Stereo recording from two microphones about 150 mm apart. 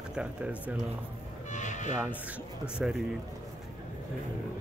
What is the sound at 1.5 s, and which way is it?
Music, 55° left (ahead or behind).